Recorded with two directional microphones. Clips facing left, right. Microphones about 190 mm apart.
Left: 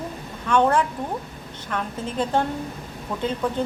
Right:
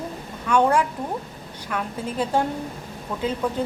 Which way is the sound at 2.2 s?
10° right (ahead or behind).